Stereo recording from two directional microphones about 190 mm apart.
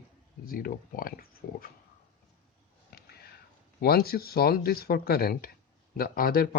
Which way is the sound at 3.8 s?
55° left (ahead or behind).